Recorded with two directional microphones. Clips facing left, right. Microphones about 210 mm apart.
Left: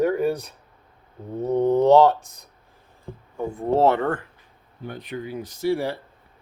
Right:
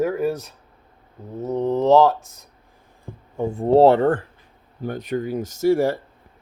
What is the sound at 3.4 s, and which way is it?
Speech, 30° right (ahead or behind).